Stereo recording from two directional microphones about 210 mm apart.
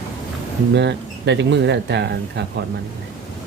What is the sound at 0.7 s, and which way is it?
Speech, 55° right (ahead or behind).